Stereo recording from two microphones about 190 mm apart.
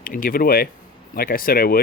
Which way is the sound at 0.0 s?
50° left (ahead or behind).